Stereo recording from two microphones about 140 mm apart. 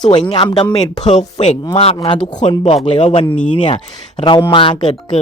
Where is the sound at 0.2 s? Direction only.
40° left (ahead or behind).